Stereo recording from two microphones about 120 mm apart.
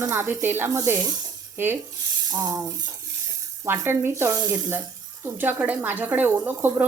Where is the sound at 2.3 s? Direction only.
30° right (ahead or behind).